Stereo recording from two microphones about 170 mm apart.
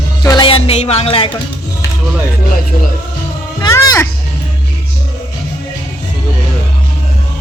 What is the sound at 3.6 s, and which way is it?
Speech, 20° left (ahead or behind).